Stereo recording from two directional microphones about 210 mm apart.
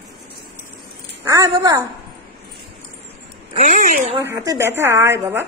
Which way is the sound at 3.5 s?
35° right (ahead or behind).